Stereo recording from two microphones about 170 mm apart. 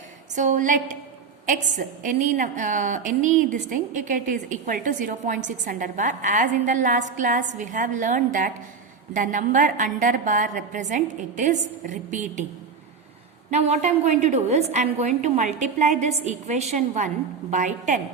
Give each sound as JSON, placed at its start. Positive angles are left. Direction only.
{"t": 0.3, "sound": "a woman's voice", "side_deg": -45}
{"t": 13.5, "sound": "a woman's voice", "side_deg": -40}